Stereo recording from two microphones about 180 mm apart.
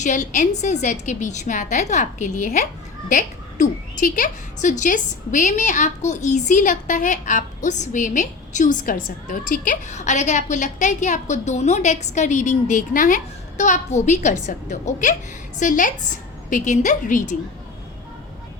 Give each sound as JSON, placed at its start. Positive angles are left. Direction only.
{"t": 0.0, "sound": "a woman's voice", "side_deg": 45}